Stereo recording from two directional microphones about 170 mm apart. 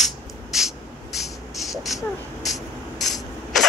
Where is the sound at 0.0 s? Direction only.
Centre (ahead or behind).